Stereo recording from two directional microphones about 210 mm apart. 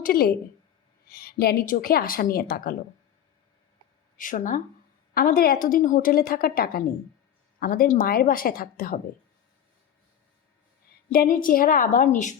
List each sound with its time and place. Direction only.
0.0 s a woman's voice: 45° left (ahead or behind)
4.2 s a woman's voice: 40° left (ahead or behind)
11.1 s a woman's voice: 45° left (ahead or behind)